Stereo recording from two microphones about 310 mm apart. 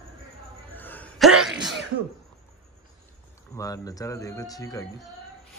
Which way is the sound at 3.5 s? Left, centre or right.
Centre.